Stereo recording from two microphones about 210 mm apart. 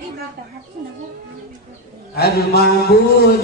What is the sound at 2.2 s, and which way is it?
Mantra, 50° left (ahead or behind).